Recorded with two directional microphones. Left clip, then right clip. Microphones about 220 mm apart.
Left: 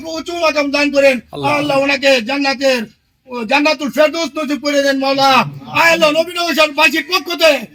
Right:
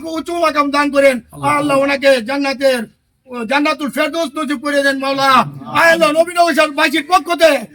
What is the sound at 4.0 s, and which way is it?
A man's voice, 10° right (ahead or behind).